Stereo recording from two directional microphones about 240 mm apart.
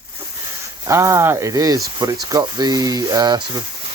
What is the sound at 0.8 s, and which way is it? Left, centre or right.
Speech, centre.